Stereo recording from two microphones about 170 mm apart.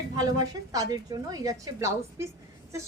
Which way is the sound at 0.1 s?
20° right (ahead or behind).